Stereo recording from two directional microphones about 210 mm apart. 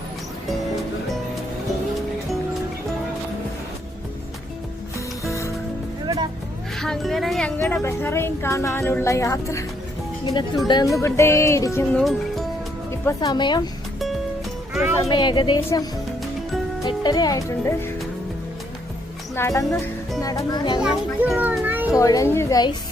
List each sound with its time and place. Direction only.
4.9 s music: 15° left (ahead or behind)
6.7 s speech: centre (ahead or behind)
7.6 s speech: 15° left (ahead or behind)
10.7 s speech: 15° left (ahead or behind)
11.9 s speech: centre (ahead or behind)
12.9 s speech: 15° left (ahead or behind)
14.7 s speech: centre (ahead or behind)
15.1 s speech: 20° left (ahead or behind)
19.4 s speech: 15° left (ahead or behind)
19.7 s speech: centre (ahead or behind)
20.2 s speech: 20° left (ahead or behind)
20.7 s a child's voice: 5° right (ahead or behind)
21.9 s speech: 15° left (ahead or behind)